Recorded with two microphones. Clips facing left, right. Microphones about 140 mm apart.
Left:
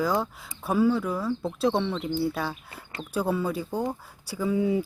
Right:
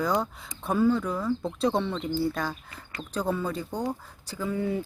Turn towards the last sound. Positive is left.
turn(degrees=10)  # may be behind; listen again after turning